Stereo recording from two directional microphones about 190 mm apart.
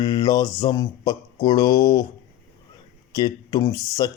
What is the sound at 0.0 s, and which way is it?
Mantra, 20° left (ahead or behind).